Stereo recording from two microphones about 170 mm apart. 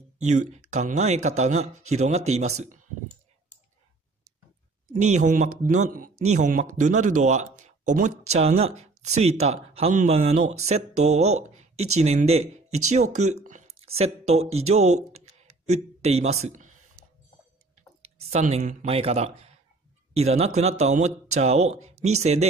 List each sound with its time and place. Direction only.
0.3 s speech: 45° right (ahead or behind)
4.9 s speech: 45° right (ahead or behind)
18.1 s speech: 40° right (ahead or behind)